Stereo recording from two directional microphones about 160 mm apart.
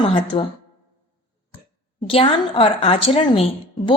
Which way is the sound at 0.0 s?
35° left (ahead or behind).